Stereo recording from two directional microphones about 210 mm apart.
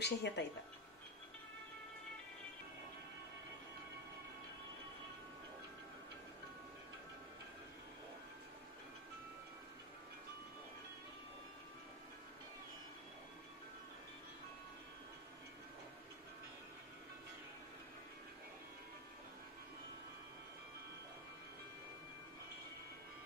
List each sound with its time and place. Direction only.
0.0 s speech: 55° left (ahead or behind)